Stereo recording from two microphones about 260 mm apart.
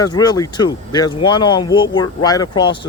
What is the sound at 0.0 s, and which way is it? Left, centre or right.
Speech, centre.